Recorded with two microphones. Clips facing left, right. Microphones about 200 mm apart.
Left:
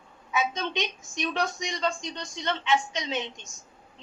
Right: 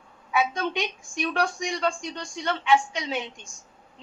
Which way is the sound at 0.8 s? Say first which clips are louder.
Right 2 dB; 20° left (ahead or behind).